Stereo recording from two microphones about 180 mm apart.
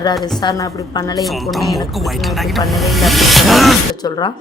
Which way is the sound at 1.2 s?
Centre (ahead or behind).